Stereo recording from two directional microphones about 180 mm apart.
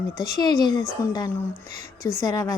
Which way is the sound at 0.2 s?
20° left (ahead or behind).